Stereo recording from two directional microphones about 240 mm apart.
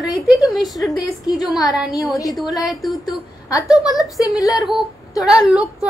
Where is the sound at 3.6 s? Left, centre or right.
Centre.